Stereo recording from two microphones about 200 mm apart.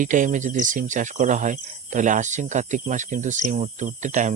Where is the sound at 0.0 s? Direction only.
40° right (ahead or behind).